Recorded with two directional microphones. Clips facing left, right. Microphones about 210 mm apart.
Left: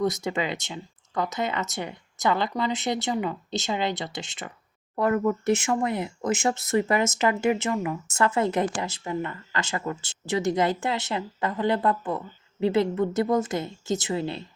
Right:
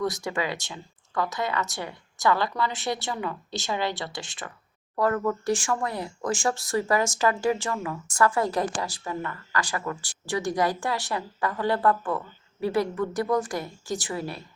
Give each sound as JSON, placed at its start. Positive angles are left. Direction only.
{"t": 0.0, "sound": "speech", "side_deg": 20}